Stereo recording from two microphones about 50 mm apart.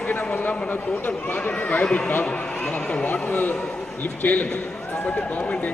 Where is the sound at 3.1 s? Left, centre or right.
Left.